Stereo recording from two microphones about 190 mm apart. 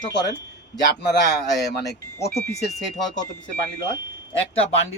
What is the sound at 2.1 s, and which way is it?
Speech, 15° left (ahead or behind).